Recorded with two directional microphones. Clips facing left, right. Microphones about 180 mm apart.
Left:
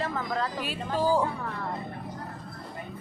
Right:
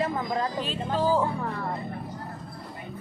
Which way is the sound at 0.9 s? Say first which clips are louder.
Even; 10° left (ahead or behind).